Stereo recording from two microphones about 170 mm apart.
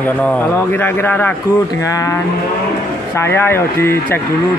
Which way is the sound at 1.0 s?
10° left (ahead or behind).